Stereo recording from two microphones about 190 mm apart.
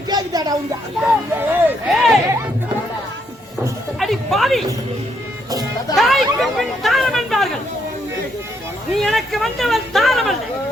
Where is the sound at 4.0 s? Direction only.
Centre (ahead or behind).